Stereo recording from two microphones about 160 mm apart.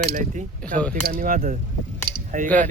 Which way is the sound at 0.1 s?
50° right (ahead or behind).